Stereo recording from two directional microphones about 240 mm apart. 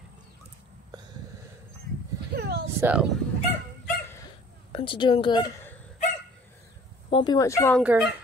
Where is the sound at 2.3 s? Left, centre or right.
Right.